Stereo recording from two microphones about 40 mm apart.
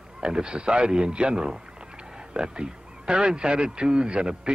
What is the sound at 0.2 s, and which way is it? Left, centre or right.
Speech, right.